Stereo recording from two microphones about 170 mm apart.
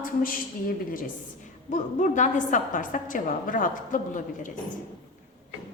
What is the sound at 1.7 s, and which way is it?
A woman's voice, 45° left (ahead or behind).